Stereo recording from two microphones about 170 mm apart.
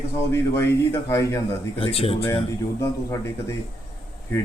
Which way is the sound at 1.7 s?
35° left (ahead or behind).